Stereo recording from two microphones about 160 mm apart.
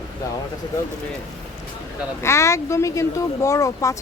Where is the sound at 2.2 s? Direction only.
20° left (ahead or behind).